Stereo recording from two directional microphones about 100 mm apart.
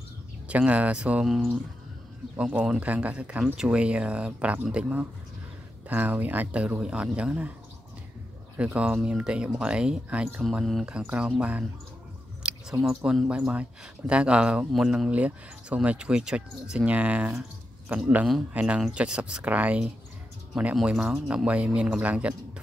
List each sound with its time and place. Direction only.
0.5 s speech: 15° right (ahead or behind)
8.5 s speech: 10° right (ahead or behind)
10.4 s speech: centre (ahead or behind)
10.9 s speech: 15° right (ahead or behind)
12.4 s a sound: 10° right (ahead or behind)
12.8 s speech: 5° right (ahead or behind)